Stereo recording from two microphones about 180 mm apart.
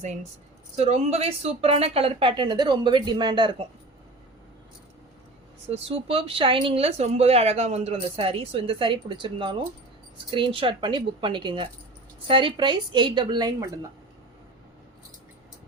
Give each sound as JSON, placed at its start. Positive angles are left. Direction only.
{"t": 0.9, "sound": "speech", "side_deg": -35}
{"t": 5.6, "sound": "speech", "side_deg": -35}